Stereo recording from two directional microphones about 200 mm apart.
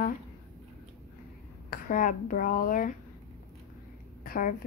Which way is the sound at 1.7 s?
40° left (ahead or behind).